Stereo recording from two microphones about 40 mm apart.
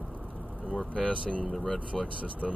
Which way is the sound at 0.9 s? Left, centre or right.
Left.